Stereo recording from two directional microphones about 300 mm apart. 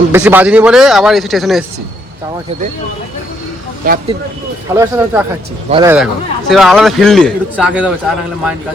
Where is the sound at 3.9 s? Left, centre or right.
Right.